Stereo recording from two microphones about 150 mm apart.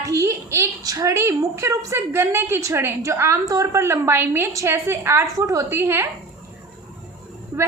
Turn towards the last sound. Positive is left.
turn(degrees=-20)  # may be behind; listen again after turning